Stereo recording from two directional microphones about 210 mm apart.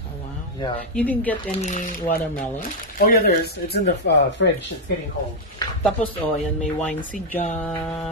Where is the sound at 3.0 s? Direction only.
45° left (ahead or behind).